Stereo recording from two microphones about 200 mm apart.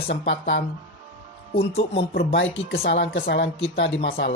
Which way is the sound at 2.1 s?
65° left (ahead or behind).